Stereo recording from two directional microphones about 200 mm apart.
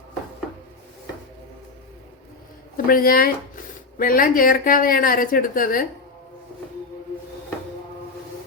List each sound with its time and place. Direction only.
2.7 s speech: 45° left (ahead or behind)